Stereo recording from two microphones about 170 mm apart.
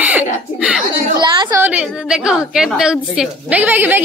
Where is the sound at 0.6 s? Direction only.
5° right (ahead or behind).